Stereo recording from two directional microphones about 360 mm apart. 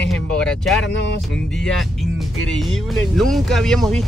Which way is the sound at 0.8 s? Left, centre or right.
Left.